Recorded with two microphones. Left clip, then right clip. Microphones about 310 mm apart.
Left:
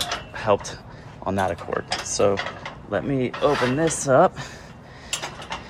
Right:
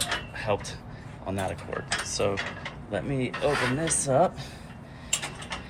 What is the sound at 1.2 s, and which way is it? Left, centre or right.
Speech, left.